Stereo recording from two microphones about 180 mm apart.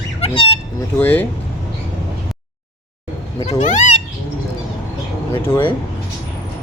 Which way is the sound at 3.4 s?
40° left (ahead or behind).